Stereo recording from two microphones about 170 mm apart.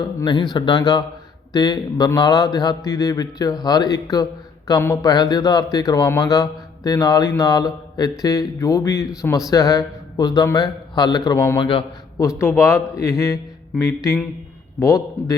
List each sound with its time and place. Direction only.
0.2 s speech: 25° left (ahead or behind)
12.4 s a man's voice: 15° left (ahead or behind)